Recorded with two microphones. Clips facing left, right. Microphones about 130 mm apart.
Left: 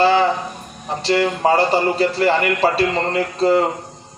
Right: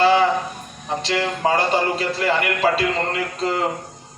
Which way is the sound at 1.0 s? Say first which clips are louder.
Left 5 dB; 30° left (ahead or behind).